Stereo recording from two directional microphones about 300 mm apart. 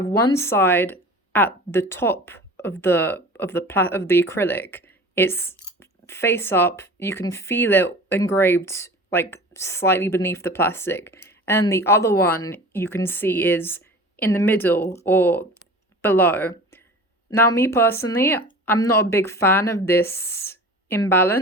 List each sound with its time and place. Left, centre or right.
0.0 s speech: centre